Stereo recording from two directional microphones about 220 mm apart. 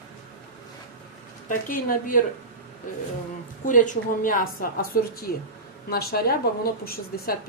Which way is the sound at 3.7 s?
35° left (ahead or behind).